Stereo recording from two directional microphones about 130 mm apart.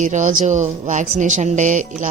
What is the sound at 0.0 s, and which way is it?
Speech, 75° right (ahead or behind).